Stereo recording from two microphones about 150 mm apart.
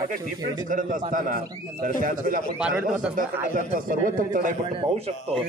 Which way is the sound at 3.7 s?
65° right (ahead or behind).